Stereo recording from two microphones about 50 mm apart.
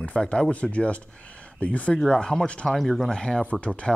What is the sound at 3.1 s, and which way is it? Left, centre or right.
Speech, centre.